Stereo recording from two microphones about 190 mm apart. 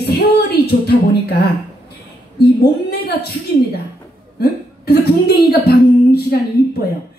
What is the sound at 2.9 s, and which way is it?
Speech, 55° left (ahead or behind).